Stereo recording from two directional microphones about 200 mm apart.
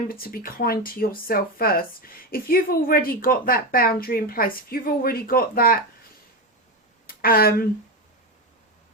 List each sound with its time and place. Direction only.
0.1 s speech: 50° left (ahead or behind)
7.1 s speech: 45° left (ahead or behind)